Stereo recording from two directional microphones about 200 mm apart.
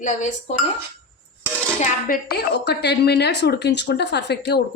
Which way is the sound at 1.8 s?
45° left (ahead or behind).